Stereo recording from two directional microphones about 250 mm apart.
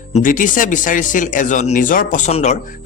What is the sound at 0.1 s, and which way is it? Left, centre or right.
Speech, left.